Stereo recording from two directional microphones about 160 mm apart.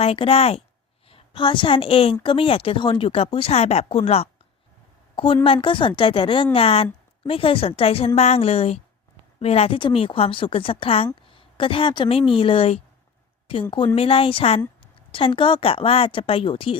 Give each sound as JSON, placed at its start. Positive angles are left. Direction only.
{"t": 0.0, "sound": "a woman's voice", "side_deg": 35}